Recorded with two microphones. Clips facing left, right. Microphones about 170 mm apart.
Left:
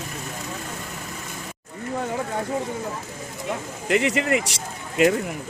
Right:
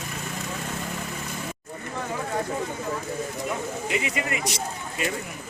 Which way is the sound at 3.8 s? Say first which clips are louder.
Left 9 dB; 70° left (ahead or behind).